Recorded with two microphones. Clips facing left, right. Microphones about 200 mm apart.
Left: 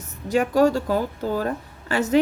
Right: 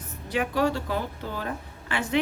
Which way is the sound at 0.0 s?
45° left (ahead or behind).